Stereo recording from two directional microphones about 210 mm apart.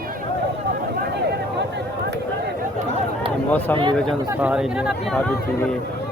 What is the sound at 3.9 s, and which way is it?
Speech, centre (ahead or behind).